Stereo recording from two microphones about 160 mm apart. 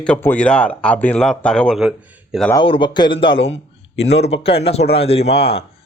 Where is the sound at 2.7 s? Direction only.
30° left (ahead or behind).